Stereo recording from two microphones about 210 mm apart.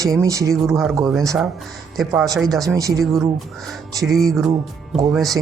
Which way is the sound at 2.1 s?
15° right (ahead or behind).